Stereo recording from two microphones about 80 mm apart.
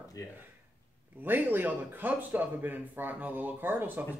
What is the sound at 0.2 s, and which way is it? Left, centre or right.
Speech, left.